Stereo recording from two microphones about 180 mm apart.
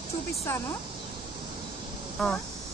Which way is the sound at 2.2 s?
Centre (ahead or behind).